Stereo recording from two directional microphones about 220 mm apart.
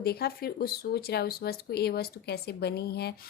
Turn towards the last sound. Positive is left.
turn(degrees=45)  # may be behind; listen again after turning